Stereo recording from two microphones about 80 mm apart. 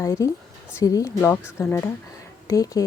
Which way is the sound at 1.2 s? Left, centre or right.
Left.